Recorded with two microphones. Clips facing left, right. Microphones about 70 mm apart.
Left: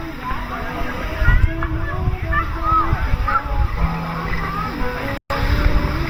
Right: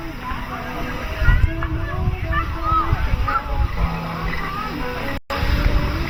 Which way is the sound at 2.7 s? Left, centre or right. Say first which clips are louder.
Left 2 dB; centre.